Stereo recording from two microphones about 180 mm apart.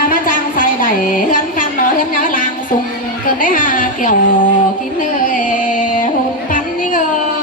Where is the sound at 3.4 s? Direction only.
50° left (ahead or behind).